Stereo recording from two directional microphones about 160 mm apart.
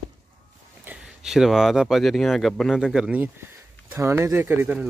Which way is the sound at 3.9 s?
20° right (ahead or behind).